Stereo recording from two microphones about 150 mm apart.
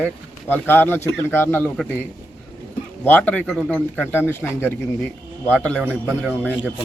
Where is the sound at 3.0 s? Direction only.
10° left (ahead or behind).